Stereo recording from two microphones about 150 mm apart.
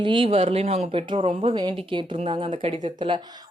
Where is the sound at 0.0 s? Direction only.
35° right (ahead or behind).